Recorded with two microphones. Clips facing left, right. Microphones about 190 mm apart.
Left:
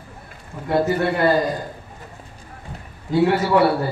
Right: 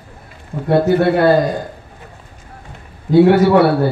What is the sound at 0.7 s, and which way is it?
Speech, 65° right (ahead or behind).